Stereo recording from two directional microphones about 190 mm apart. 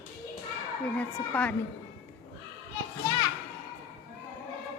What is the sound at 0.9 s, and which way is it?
Speech, 10° left (ahead or behind).